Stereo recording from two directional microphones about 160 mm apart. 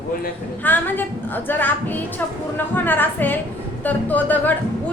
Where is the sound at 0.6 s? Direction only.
10° left (ahead or behind).